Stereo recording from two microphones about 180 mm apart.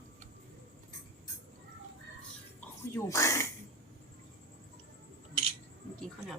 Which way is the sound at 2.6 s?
15° left (ahead or behind).